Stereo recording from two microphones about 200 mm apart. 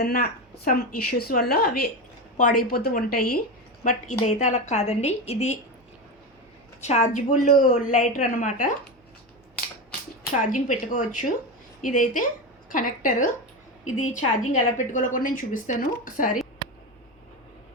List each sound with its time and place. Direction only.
0.0 s a woman's voice: 50° left (ahead or behind); by 5.5 s 35° left (ahead or behind)
6.8 s a woman's voice: 35° left (ahead or behind)
10.3 s a woman's voice: 40° left (ahead or behind)